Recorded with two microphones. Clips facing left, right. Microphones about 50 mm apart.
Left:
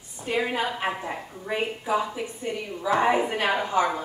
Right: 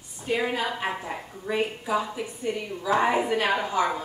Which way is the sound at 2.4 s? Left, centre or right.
Left.